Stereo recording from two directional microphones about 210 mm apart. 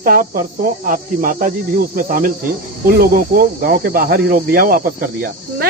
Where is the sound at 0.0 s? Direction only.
40° right (ahead or behind).